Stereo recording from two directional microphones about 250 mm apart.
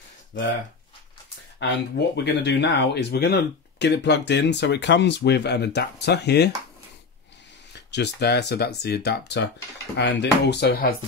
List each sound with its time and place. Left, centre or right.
1.6 s speech: left
7.7 s speech: left